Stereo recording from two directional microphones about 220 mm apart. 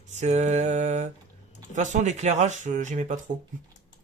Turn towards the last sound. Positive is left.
turn(degrees=-35)  # may be behind; listen again after turning